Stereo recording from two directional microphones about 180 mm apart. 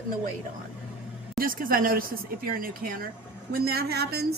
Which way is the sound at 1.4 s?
50° right (ahead or behind).